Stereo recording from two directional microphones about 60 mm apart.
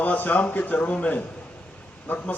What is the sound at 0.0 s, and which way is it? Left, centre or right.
A man's voice, left.